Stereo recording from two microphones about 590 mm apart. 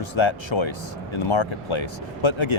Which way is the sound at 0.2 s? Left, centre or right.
Left.